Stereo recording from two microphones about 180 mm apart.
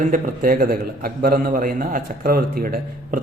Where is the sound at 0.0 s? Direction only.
50° right (ahead or behind).